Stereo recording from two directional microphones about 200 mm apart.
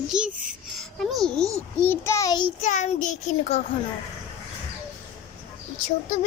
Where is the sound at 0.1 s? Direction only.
5° right (ahead or behind).